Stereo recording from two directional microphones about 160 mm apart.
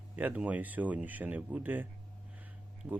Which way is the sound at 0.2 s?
10° right (ahead or behind).